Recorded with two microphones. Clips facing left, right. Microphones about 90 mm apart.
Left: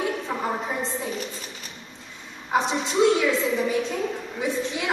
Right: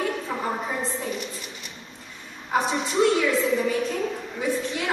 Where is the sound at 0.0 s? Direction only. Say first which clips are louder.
Even; 15° left (ahead or behind).